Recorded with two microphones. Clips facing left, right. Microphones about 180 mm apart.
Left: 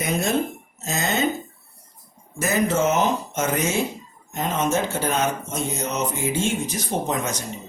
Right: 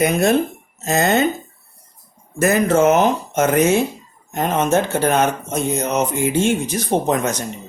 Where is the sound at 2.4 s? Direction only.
60° right (ahead or behind).